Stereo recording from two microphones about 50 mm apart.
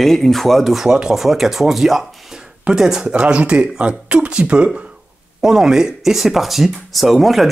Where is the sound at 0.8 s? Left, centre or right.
Centre.